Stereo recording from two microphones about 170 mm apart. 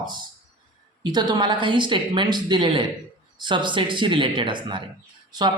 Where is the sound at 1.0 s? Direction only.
25° right (ahead or behind).